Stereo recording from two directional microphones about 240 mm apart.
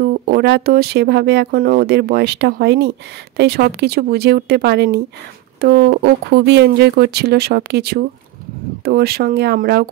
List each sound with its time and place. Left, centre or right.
0.0 s speech: right